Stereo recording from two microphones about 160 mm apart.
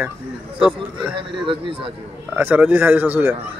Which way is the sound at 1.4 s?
35° right (ahead or behind).